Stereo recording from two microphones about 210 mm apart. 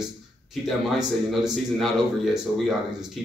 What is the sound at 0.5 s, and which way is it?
A man's voice, centre (ahead or behind).